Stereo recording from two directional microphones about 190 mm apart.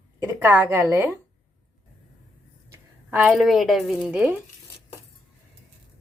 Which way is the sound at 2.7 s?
10° right (ahead or behind).